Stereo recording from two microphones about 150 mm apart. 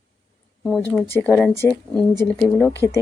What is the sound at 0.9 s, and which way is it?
Speech, 15° left (ahead or behind).